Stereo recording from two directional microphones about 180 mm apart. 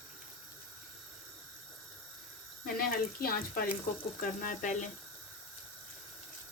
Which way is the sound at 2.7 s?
55° left (ahead or behind).